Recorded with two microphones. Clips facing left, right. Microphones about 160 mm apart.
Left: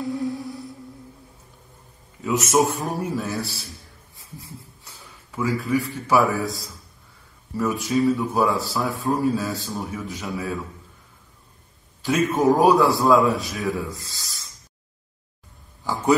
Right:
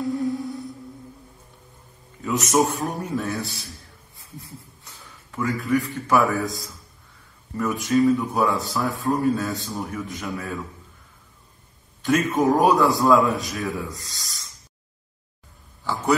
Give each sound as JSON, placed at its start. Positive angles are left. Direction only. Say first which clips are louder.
{"t": 0.0, "sound": "music", "louder": "right 2 dB", "side_deg": 0}
{"t": 2.2, "sound": "speech", "louder": "left 1 dB", "side_deg": 0}
{"t": 5.3, "sound": "a man's voice", "louder": "even", "side_deg": 0}
{"t": 12.0, "sound": "speech", "louder": "even", "side_deg": 5}
{"t": 15.8, "sound": "a sound", "louder": "left 2 dB", "side_deg": 15}